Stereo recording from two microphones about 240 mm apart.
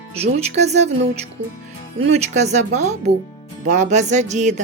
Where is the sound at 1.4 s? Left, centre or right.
Right.